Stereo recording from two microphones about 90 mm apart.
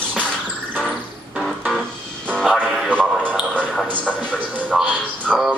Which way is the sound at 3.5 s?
15° left (ahead or behind).